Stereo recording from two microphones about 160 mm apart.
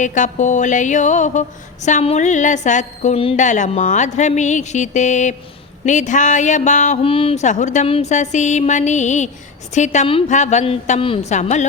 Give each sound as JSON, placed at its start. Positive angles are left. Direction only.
{"t": 0.0, "sound": "music", "side_deg": 50}
{"t": 7.0, "sound": "music", "side_deg": 35}